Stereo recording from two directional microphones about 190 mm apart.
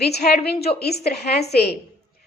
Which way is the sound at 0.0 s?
60° left (ahead or behind).